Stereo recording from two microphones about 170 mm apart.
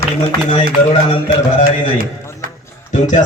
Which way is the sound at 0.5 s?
40° left (ahead or behind).